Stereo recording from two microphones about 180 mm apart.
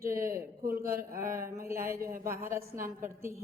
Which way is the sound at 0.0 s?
15° right (ahead or behind).